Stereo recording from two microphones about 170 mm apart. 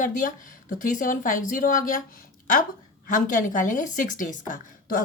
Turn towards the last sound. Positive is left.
turn(degrees=55)  # may be behind; listen again after turning